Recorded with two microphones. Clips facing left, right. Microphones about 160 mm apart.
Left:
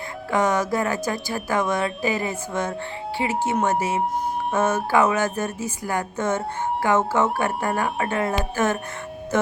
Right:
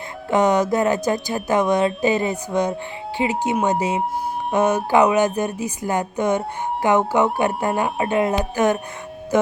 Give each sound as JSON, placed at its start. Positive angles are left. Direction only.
{"t": 0.3, "sound": "a woman's voice", "side_deg": -20}